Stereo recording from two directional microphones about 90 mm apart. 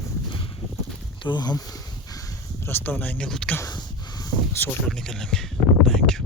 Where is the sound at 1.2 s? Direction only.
55° left (ahead or behind).